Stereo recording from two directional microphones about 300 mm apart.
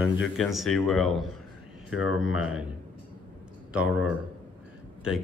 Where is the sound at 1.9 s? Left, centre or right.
Left.